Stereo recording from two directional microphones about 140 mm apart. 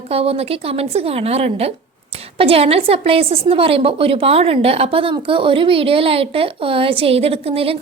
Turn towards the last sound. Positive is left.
turn(degrees=-45)  # may be behind; listen again after turning